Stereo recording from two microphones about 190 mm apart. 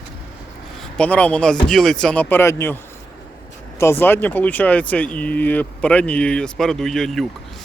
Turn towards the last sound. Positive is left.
turn(degrees=0)  # may be behind; listen again after turning